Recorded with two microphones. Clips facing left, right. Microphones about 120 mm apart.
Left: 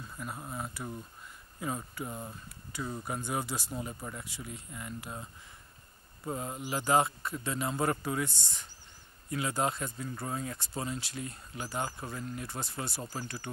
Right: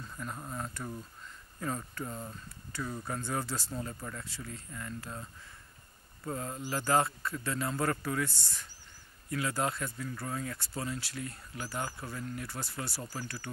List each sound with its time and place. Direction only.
0.1 s speech: 10° left (ahead or behind)